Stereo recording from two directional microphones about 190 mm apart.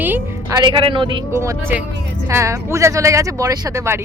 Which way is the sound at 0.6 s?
25° right (ahead or behind).